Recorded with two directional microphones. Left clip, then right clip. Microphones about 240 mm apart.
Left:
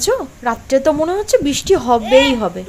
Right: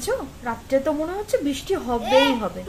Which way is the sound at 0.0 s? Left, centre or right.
Left.